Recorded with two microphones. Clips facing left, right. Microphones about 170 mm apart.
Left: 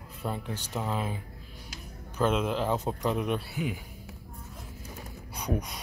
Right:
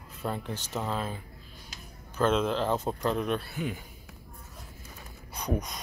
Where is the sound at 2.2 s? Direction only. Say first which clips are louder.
Right 1 dB; 10° left (ahead or behind).